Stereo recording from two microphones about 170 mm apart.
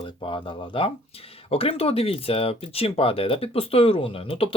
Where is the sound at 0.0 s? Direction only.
30° left (ahead or behind).